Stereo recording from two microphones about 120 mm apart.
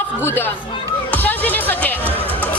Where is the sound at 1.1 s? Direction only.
15° left (ahead or behind).